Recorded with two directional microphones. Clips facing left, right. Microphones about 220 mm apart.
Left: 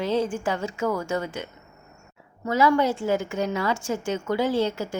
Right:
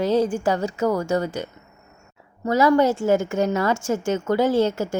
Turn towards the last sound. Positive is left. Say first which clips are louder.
# right 4 dB
turn(degrees=-50)  # may be behind; listen again after turning